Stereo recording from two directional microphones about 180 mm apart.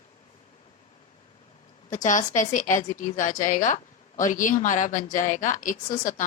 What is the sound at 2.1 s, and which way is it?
A woman's voice, 45° left (ahead or behind).